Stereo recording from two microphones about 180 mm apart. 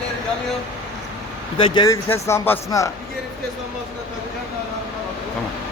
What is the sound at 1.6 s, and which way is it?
Speech, 25° left (ahead or behind).